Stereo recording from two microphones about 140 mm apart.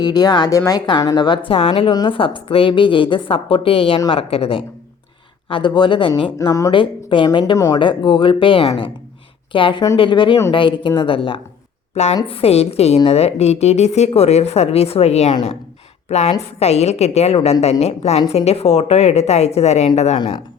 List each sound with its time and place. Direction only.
0.0 s speech: 30° left (ahead or behind)
1.5 s a woman's voice: 45° left (ahead or behind)
11.9 s a woman's voice: 50° left (ahead or behind)